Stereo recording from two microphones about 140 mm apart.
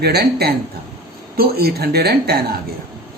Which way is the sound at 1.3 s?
90° right.